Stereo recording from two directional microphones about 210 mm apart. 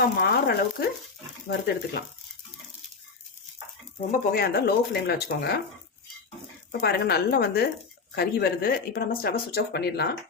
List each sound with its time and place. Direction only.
0.2 s speech: 50° left (ahead or behind)
4.1 s speech: 45° left (ahead or behind)
6.7 s speech: 50° left (ahead or behind)